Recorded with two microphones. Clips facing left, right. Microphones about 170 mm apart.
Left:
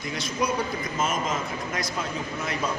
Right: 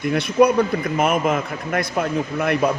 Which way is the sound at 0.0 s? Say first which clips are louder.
Right 12 dB; 60° right (ahead or behind).